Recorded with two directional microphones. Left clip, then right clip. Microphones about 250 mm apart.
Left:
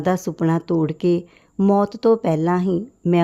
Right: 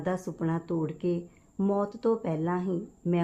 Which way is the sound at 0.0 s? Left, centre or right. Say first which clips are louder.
Left 11 dB; left.